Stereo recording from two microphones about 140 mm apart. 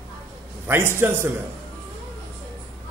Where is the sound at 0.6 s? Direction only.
15° right (ahead or behind).